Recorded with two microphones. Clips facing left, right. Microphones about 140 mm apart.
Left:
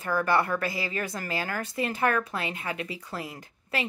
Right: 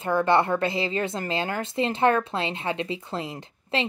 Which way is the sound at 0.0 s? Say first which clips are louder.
Right 4 dB; 25° right (ahead or behind).